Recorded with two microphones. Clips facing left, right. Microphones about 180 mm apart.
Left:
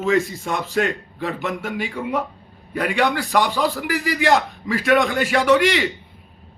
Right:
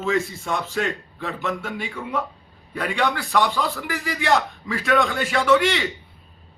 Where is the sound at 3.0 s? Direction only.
40° left (ahead or behind).